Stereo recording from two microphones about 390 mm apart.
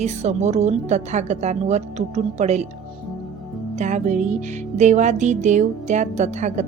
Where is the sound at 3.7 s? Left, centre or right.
Centre.